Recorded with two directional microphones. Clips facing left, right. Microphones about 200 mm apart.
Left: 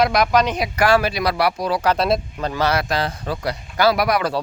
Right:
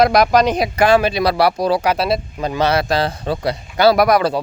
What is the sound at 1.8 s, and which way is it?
Speech, 5° right (ahead or behind).